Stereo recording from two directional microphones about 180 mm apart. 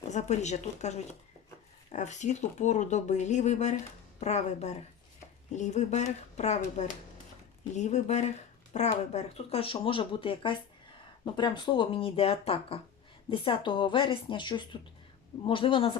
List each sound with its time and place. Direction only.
0.1 s speech: 40° left (ahead or behind)